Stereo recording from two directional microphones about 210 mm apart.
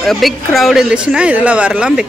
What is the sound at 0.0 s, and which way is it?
A man's voice, centre (ahead or behind).